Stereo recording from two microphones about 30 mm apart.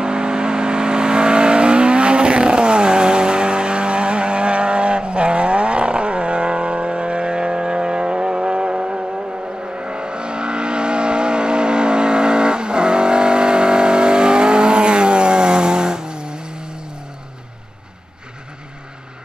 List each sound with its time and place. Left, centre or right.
0.0 s vehicle: right